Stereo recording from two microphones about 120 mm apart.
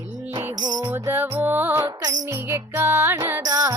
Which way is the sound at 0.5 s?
35° right (ahead or behind).